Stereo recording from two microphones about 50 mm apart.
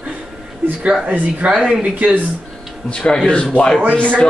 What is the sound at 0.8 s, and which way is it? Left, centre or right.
Speech, centre.